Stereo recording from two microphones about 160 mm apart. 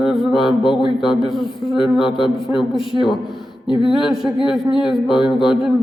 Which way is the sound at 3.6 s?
30° left (ahead or behind).